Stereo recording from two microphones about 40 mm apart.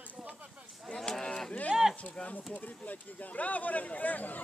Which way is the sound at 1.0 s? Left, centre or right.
Centre.